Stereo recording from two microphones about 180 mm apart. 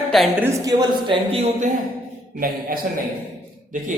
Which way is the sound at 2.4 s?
50° right (ahead or behind).